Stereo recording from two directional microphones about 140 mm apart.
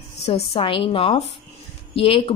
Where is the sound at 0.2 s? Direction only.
45° left (ahead or behind).